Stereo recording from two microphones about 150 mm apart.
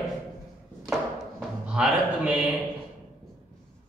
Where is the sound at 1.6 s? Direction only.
5° right (ahead or behind).